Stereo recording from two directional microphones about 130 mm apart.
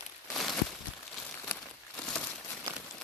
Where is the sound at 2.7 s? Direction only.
20° right (ahead or behind).